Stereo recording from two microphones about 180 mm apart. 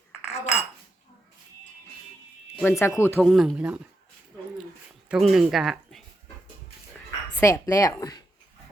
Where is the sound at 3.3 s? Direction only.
Centre (ahead or behind).